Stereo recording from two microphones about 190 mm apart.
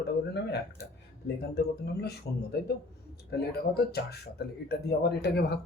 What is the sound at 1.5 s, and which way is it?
Speech, 60° left (ahead or behind).